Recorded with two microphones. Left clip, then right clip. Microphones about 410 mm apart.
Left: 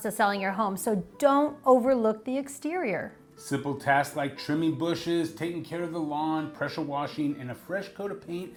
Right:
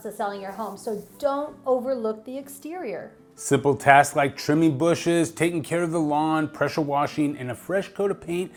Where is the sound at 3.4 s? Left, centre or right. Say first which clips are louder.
Right 9 dB; right.